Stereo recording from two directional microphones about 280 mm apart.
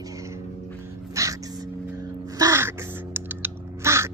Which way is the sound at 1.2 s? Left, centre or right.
Centre.